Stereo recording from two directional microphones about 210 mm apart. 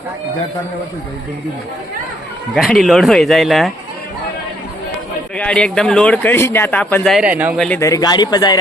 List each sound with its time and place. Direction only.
2.6 s a man's voice: centre (ahead or behind)
5.4 s a man's voice: 5° left (ahead or behind)
7.6 s speech: 10° left (ahead or behind)